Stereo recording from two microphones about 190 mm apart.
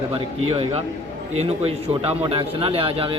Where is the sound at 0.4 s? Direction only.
30° right (ahead or behind).